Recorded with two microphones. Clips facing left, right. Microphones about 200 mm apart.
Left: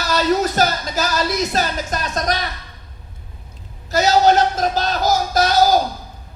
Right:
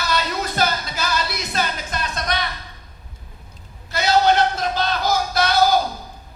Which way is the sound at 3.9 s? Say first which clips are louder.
Left 3 dB; 40° left (ahead or behind).